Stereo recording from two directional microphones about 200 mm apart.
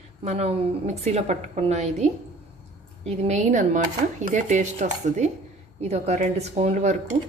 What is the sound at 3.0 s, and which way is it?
A woman's voice, 35° right (ahead or behind).